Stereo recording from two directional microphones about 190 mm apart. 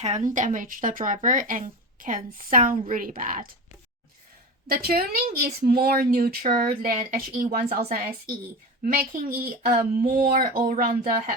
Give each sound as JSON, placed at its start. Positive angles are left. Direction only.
{"t": 0.0, "sound": "speech", "side_deg": -40}
{"t": 4.7, "sound": "speech", "side_deg": -55}